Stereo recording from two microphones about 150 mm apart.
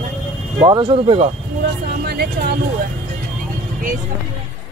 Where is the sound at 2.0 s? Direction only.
90° right.